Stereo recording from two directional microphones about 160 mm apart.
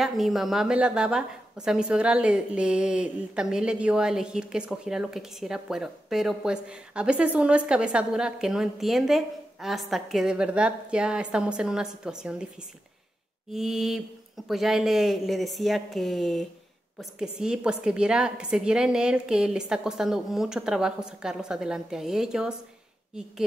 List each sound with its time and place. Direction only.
0.0 s a woman's voice: centre (ahead or behind)
13.5 s a woman's voice: centre (ahead or behind)